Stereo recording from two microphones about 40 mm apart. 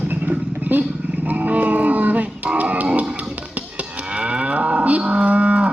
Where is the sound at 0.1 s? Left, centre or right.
Right.